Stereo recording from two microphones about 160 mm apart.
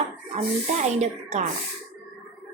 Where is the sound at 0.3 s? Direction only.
45° right (ahead or behind).